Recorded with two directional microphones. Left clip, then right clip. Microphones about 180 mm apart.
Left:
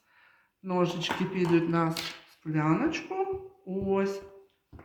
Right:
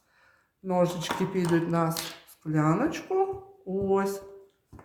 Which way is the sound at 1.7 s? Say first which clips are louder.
Right 1 dB; 45° right (ahead or behind).